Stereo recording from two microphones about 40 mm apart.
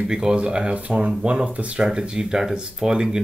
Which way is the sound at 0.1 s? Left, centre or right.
Right.